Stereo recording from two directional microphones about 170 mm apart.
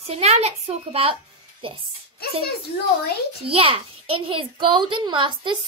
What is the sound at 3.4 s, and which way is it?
A child's voice, 35° right (ahead or behind).